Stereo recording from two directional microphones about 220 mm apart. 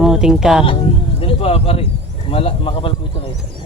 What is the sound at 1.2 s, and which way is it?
Speech, 25° left (ahead or behind).